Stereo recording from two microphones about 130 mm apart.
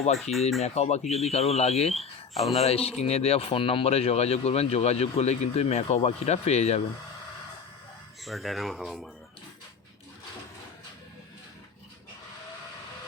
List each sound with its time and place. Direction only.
0.2 s speech: centre (ahead or behind)
0.6 s speech: 55° left (ahead or behind)
2.3 s speech: centre (ahead or behind)
2.6 s speech: 50° left (ahead or behind)
8.2 s speech: centre (ahead or behind)